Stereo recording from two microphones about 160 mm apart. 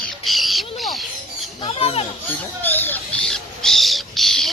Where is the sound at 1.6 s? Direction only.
35° left (ahead or behind).